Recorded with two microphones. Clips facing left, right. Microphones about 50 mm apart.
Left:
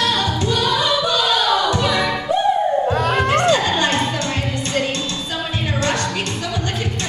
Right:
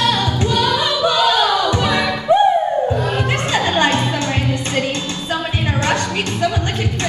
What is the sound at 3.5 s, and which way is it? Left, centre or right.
Music, right.